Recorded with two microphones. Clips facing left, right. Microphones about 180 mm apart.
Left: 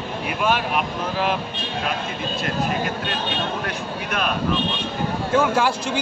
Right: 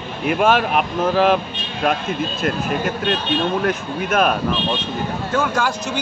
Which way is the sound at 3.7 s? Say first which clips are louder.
Right 6 dB; 50° right (ahead or behind).